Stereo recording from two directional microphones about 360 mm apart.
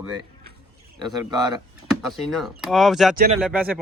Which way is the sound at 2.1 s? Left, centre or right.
Centre.